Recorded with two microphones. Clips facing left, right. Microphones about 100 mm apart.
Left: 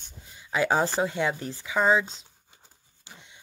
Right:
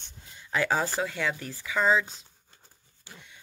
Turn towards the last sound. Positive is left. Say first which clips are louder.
# even
turn(degrees=20)  # may be behind; listen again after turning